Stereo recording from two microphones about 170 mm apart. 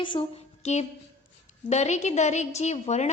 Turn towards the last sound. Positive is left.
turn(degrees=40)  # may be behind; listen again after turning